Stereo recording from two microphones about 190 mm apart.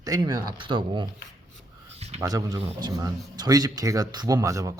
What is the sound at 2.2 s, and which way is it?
A man's voice, 20° right (ahead or behind).